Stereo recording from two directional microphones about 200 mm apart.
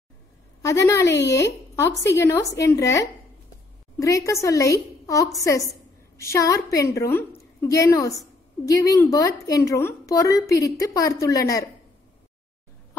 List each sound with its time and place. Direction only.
0.6 s a woman's voice: 15° left (ahead or behind)